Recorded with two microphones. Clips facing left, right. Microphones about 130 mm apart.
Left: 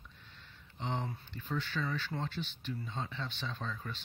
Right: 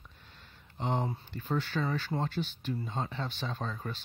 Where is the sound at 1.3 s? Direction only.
40° right (ahead or behind).